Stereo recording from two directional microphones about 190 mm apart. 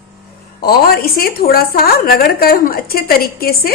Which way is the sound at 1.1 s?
50° left (ahead or behind).